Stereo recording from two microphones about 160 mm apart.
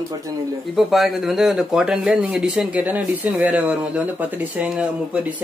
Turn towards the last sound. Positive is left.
turn(degrees=-5)  # may be behind; listen again after turning